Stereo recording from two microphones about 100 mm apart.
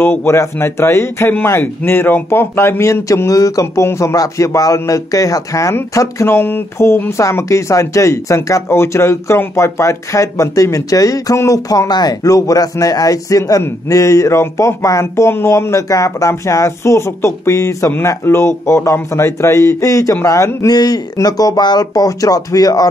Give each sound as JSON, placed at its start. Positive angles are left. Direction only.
{"t": 0.0, "sound": "a man's voice", "side_deg": 20}